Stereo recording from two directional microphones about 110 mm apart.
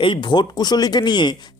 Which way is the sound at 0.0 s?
45° left (ahead or behind).